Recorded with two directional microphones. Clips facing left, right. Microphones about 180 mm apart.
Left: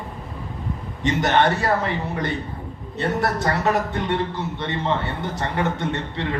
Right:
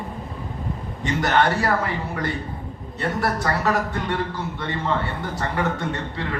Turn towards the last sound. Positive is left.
turn(degrees=20)  # may be behind; listen again after turning